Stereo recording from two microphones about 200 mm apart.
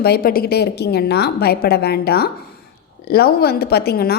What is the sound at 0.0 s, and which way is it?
A woman's voice, 50° left (ahead or behind).